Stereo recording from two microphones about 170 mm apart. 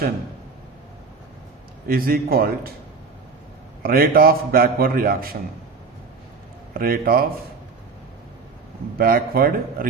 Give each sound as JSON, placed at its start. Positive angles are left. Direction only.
{"t": 1.9, "sound": "a man's voice", "side_deg": -60}
{"t": 3.8, "sound": "a man's voice", "side_deg": -60}
{"t": 6.7, "sound": "a man's voice", "side_deg": -60}
{"t": 9.0, "sound": "a man's voice", "side_deg": -60}